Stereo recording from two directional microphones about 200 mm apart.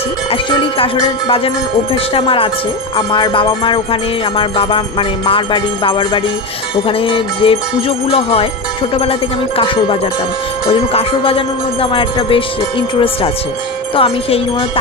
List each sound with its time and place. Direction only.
0.3 s music: 25° left (ahead or behind)
10.7 s music: 30° left (ahead or behind)